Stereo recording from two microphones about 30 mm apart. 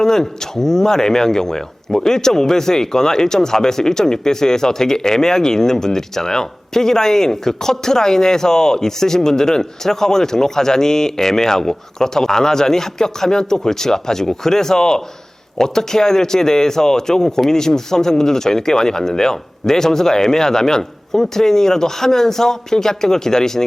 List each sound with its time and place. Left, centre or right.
0.0 s speech: centre